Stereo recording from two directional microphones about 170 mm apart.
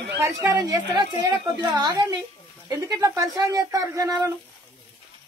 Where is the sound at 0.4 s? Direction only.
15° right (ahead or behind).